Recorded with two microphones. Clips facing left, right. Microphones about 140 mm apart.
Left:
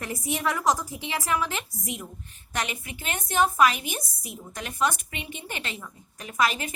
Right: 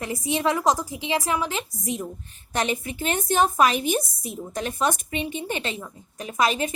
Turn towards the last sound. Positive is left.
turn(degrees=-25)  # may be behind; listen again after turning